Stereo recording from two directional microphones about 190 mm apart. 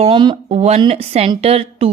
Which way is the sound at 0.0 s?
25° right (ahead or behind).